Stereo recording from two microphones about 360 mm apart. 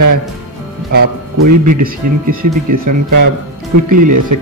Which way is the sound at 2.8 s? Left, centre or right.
Right.